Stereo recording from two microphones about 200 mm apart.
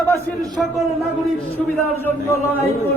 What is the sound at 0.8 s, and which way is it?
Speech, centre (ahead or behind).